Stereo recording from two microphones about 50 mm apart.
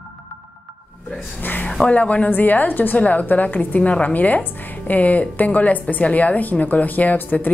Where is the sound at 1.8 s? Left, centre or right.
Left.